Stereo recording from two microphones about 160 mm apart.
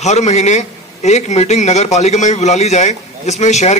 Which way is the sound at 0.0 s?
45° left (ahead or behind).